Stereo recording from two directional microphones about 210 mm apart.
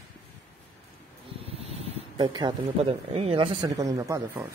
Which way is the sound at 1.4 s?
25° right (ahead or behind).